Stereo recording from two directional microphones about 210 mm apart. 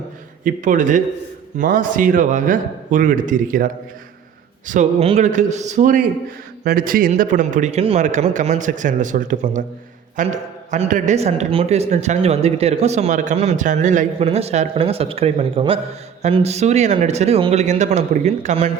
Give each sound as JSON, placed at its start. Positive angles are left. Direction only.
{"t": 0.4, "sound": "speech", "side_deg": -35}